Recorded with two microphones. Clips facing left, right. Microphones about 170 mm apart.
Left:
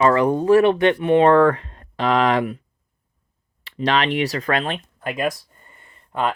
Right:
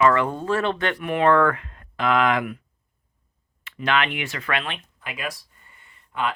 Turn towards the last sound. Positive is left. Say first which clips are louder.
# left 4 dB
turn(degrees=45)  # may be behind; listen again after turning